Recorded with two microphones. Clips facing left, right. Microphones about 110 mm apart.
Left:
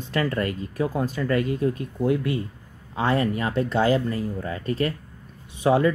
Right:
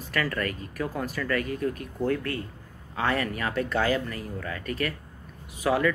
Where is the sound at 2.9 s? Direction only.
25° left (ahead or behind).